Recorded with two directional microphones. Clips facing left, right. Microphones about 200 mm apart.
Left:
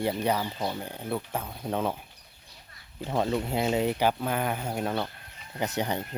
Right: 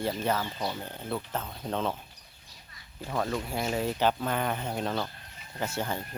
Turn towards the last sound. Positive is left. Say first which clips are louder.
# left 3 dB
turn(degrees=20)  # may be behind; listen again after turning